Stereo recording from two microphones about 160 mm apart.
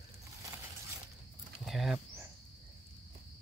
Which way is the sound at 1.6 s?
Centre (ahead or behind).